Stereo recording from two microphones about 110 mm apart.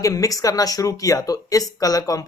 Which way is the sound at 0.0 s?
30° left (ahead or behind).